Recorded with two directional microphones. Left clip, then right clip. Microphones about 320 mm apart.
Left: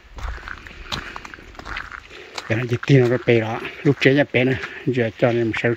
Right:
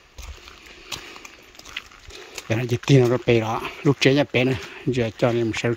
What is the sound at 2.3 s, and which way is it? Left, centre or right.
Speech, centre.